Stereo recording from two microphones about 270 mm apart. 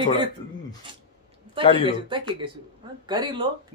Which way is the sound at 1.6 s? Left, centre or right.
Centre.